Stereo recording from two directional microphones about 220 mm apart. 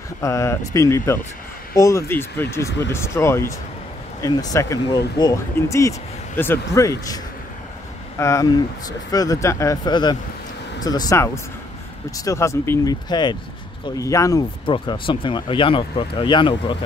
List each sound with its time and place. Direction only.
0.2 s speech: 15° left (ahead or behind)
8.2 s speech: 15° left (ahead or behind)